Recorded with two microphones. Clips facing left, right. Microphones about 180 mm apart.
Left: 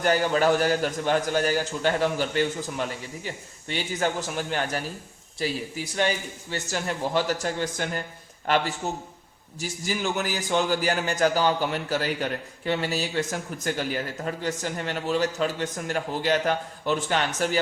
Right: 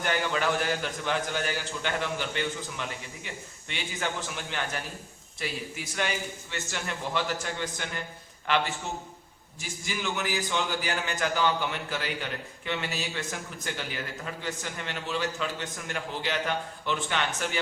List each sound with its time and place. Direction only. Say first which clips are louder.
0.0 s a man's voice: left 6 dB; 40° left (ahead or behind)